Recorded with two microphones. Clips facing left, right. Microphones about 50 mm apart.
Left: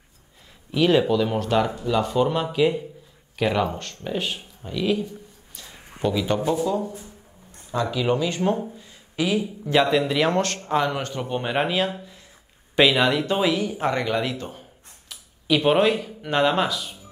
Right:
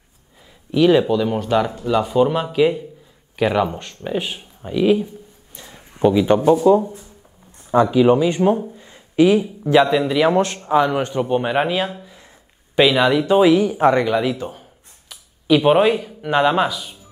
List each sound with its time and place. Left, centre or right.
0.7 s a man's voice: centre
8.7 s a sound: right
9.7 s a man's voice: centre
13.5 s speech: right
14.0 s speech: centre